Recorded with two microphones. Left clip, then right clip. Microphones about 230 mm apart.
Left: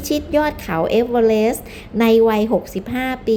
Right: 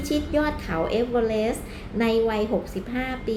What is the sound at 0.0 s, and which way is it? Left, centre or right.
A woman's voice, left.